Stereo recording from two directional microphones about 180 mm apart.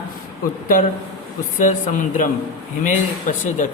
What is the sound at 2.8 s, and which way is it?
Speech, 45° left (ahead or behind).